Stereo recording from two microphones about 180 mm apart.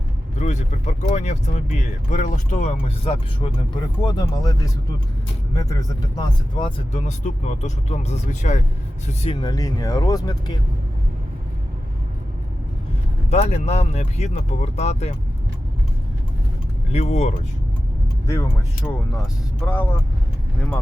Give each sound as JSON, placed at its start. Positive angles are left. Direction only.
{"t": 0.3, "sound": "speech", "side_deg": 40}
{"t": 4.0, "sound": "speech", "side_deg": 20}
{"t": 6.1, "sound": "speech", "side_deg": 25}
{"t": 9.2, "sound": "speech", "side_deg": 25}
{"t": 13.3, "sound": "speech", "side_deg": 35}
{"t": 16.9, "sound": "speech", "side_deg": 40}
{"t": 18.8, "sound": "speech", "side_deg": 20}
{"t": 19.6, "sound": "speech", "side_deg": 10}